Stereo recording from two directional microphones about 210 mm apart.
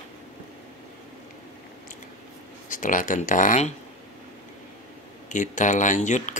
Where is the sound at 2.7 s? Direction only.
40° left (ahead or behind).